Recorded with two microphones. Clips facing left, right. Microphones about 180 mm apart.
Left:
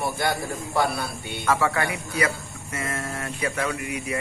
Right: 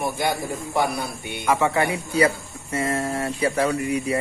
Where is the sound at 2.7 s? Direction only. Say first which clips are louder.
Right 7 dB; 30° right (ahead or behind).